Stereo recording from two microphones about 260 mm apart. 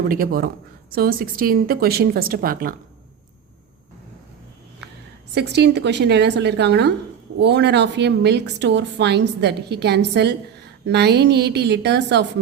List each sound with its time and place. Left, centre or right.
0.1 s speech: right
5.3 s speech: right